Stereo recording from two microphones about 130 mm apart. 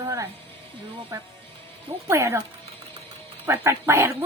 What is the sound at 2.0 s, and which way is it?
Speech, 20° right (ahead or behind).